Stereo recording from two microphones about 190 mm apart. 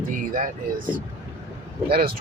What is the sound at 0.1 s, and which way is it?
Speech, 45° right (ahead or behind).